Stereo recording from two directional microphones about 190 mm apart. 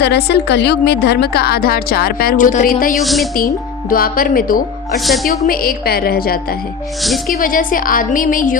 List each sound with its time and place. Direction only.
0.0 s a woman's voice: 60° left (ahead or behind); by 2.9 s 45° left (ahead or behind)
3.0 s speech: centre (ahead or behind)
3.8 s a woman's voice: 50° left (ahead or behind)
5.0 s speech: centre (ahead or behind)
5.5 s a woman's voice: 50° left (ahead or behind)
7.0 s speech: centre (ahead or behind)
7.3 s a woman's voice: 45° left (ahead or behind)